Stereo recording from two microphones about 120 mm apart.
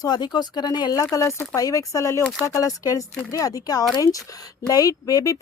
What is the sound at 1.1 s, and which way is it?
Speech, 25° left (ahead or behind).